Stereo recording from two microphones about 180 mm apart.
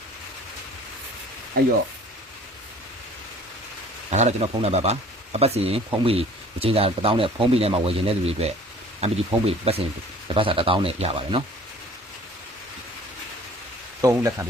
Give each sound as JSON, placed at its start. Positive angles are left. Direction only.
{"t": 1.6, "sound": "speech", "side_deg": -55}
{"t": 4.1, "sound": "a man's voice", "side_deg": -40}
{"t": 14.0, "sound": "speech", "side_deg": -15}